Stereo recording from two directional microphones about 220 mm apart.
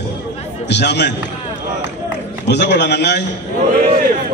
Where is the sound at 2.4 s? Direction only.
50° left (ahead or behind).